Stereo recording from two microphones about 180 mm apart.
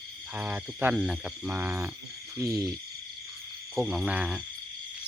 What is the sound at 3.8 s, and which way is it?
Speech, 5° right (ahead or behind).